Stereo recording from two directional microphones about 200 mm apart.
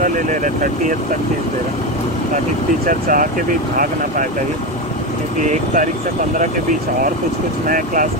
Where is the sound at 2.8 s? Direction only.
45° right (ahead or behind).